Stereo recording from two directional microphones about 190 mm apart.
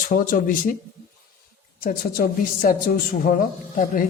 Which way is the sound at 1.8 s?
50° left (ahead or behind).